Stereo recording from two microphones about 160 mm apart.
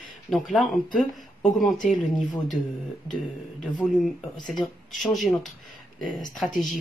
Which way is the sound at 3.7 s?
Centre (ahead or behind).